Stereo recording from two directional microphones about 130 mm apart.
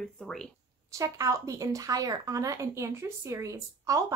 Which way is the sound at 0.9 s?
25° right (ahead or behind).